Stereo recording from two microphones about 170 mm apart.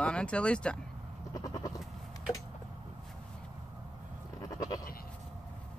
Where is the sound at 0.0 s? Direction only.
5° left (ahead or behind).